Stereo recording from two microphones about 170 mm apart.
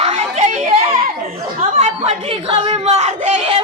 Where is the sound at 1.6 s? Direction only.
35° right (ahead or behind).